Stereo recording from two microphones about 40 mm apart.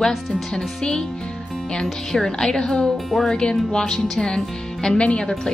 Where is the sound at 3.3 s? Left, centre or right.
Centre.